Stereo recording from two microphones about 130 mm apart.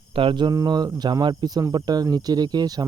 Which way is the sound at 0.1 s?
40° right (ahead or behind).